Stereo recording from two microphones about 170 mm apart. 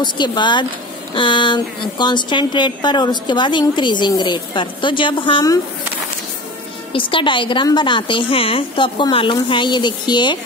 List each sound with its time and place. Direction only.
0.0 s a woman's voice: 25° left (ahead or behind)
6.9 s a woman's voice: 30° left (ahead or behind)